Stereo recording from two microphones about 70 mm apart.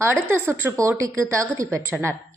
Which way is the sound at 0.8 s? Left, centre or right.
Right.